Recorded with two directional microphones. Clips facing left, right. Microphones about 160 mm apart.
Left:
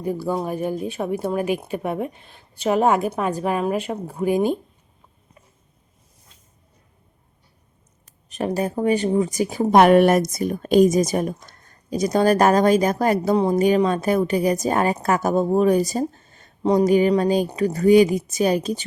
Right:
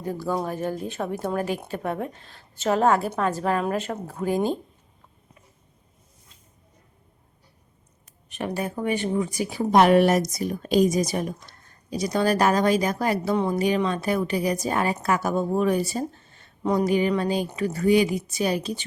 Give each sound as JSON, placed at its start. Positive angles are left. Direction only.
{"t": 0.0, "sound": "a woman's voice", "side_deg": 10}
{"t": 8.3, "sound": "speech", "side_deg": 40}